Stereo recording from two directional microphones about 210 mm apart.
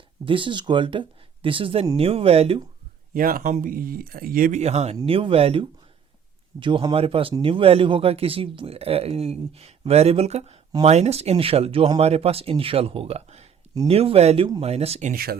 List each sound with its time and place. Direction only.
0.3 s a man's voice: 25° right (ahead or behind)
3.1 s a man's voice: 40° right (ahead or behind)
15.1 s speech: 45° right (ahead or behind)